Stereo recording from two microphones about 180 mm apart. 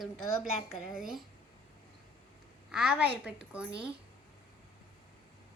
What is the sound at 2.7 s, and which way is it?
Speech, 5° right (ahead or behind).